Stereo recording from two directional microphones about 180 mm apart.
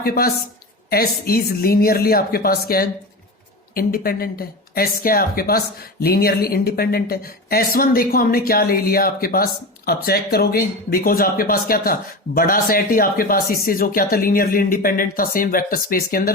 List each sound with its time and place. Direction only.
0.0 s a woman's voice: 55° left (ahead or behind)